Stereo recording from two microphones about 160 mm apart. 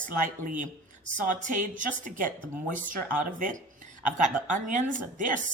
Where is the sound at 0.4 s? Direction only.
50° right (ahead or behind).